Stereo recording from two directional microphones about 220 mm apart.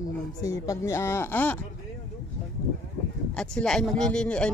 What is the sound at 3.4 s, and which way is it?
Speech, 5° left (ahead or behind).